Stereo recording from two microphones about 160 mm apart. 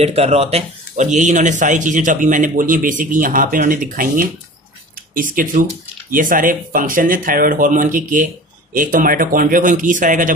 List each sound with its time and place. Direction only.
0.0 s speech: 40° right (ahead or behind)